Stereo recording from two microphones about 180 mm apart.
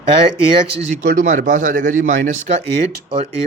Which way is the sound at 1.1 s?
45° right (ahead or behind).